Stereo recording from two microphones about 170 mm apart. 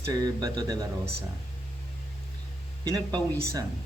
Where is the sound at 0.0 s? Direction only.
20° right (ahead or behind).